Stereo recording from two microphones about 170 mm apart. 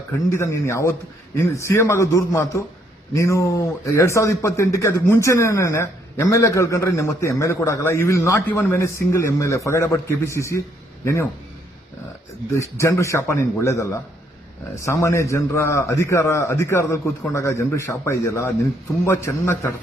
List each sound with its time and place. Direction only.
0.3 s a man's voice: 15° left (ahead or behind)
12.5 s a man's voice: 15° left (ahead or behind)